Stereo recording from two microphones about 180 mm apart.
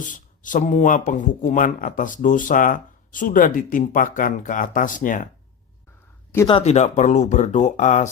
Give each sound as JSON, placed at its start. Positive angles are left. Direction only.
{"t": 0.0, "sound": "speech", "side_deg": 45}
{"t": 6.5, "sound": "speech", "side_deg": 35}